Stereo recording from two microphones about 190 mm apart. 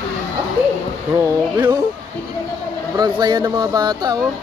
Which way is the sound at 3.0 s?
20° right (ahead or behind).